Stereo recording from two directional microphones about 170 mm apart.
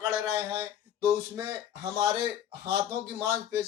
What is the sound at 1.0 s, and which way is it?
Speech, 20° right (ahead or behind).